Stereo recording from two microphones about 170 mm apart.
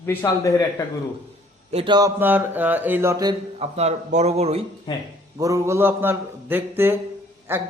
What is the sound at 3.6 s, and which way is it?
A man's voice, 40° right (ahead or behind).